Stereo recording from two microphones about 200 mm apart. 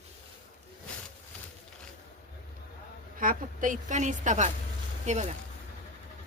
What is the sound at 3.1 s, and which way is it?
A woman's voice, 45° right (ahead or behind).